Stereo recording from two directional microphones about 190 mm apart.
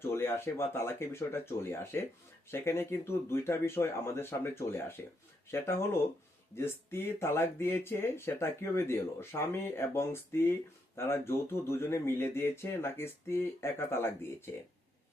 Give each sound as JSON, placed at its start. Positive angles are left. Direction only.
{"t": 0.0, "sound": "speech", "side_deg": 10}